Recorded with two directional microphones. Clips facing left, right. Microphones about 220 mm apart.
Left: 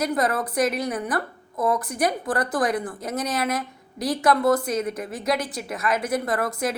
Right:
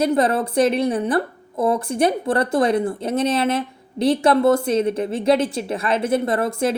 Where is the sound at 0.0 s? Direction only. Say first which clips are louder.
Right 5 dB; 30° right (ahead or behind).